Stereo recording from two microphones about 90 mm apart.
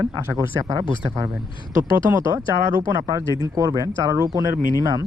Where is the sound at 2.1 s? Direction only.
30° right (ahead or behind).